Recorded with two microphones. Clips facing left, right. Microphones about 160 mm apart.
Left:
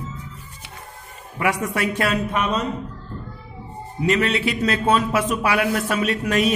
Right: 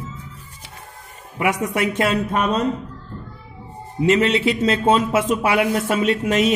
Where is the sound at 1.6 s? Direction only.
20° right (ahead or behind).